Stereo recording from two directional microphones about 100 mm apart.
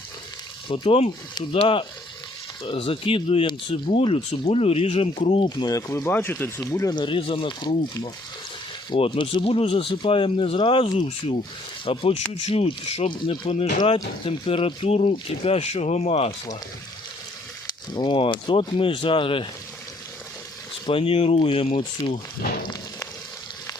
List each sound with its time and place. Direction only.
0.7 s speech: 70° left (ahead or behind)
1.5 s speech: 60° left (ahead or behind)
3.9 s speech: 80° left
5.5 s speech: 40° left (ahead or behind)
6.1 s speech: 15° left (ahead or behind)
6.7 s speech: 30° left (ahead or behind)
6.9 s speech: 55° left (ahead or behind)
9.0 s speech: 55° left (ahead or behind); by 11.3 s 80° left
11.9 s speech: 65° left (ahead or behind)
12.5 s speech: 80° left
13.1 s speech: 50° left (ahead or behind)
13.5 s speech: 70° left (ahead or behind); by 16.3 s 90° left
17.9 s speech: 50° left (ahead or behind)
20.8 s speech: 65° left (ahead or behind)